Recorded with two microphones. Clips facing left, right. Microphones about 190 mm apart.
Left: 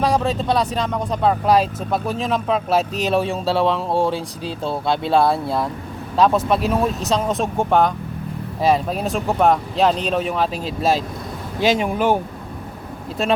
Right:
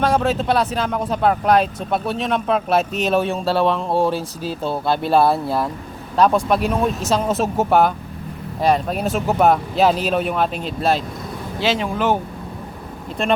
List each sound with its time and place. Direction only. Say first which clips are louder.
0.0 s speech: right 1 dB; centre (ahead or behind)
11.6 s speech: left 2 dB; 15° left (ahead or behind)